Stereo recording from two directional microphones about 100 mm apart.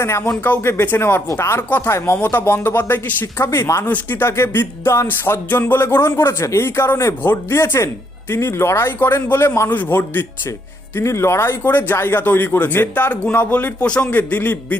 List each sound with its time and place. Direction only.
0.4 s speech: 20° left (ahead or behind)